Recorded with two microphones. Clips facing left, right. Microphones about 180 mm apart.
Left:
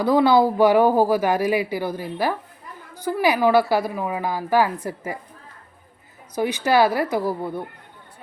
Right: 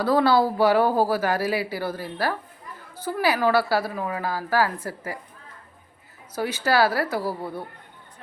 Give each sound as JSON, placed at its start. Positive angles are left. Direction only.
{"t": 0.0, "sound": "speech", "side_deg": 15}
{"t": 6.3, "sound": "speech", "side_deg": 15}